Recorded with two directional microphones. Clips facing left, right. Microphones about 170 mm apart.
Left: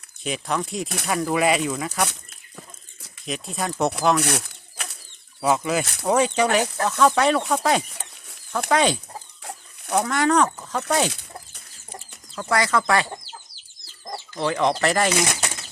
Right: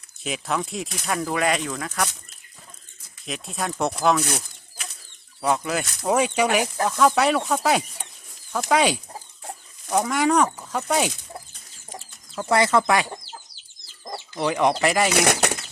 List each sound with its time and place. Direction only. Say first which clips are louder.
0.2 s speech: left 1 dB; centre (ahead or behind)
3.2 s speech: left 1 dB; centre (ahead or behind)
4.2 s a sound: left 3 dB; 70° left (ahead or behind)
5.4 s speech: left 2 dB; centre (ahead or behind)
6.1 s speech: left 1 dB; 10° right (ahead or behind)
9.4 s chicken: even; 80° left
10.0 s speech: even; 10° right (ahead or behind)
12.4 s speech: right 3 dB; 25° right (ahead or behind)
14.3 s speech: right 1 dB; 15° right (ahead or behind)
15.3 s speech: right 7 dB; 65° right (ahead or behind)